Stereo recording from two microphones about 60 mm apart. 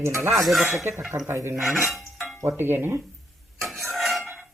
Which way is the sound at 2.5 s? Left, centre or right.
Right.